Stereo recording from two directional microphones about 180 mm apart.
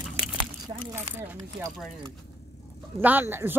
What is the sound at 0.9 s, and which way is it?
Speech, 15° right (ahead or behind).